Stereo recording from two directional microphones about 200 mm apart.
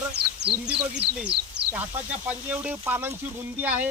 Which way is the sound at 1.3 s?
55° right (ahead or behind).